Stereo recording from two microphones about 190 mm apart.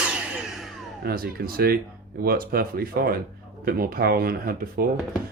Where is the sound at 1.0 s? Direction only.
50° right (ahead or behind).